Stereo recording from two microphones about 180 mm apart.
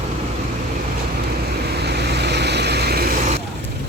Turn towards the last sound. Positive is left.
turn(degrees=-60)  # may be behind; listen again after turning